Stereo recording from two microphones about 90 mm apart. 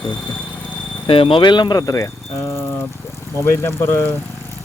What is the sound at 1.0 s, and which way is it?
Speech, 85° left.